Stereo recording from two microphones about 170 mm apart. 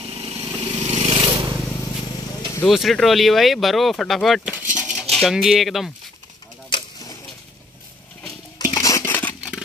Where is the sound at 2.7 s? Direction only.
Centre (ahead or behind).